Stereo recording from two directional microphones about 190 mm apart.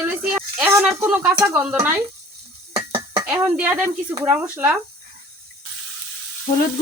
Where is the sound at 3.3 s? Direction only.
10° right (ahead or behind).